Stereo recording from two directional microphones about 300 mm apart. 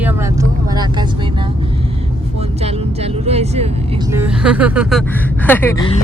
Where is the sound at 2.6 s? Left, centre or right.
Right.